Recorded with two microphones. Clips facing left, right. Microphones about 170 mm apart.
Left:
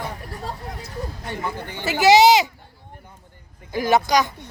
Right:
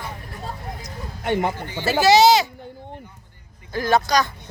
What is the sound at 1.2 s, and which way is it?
Speech, 70° right (ahead or behind).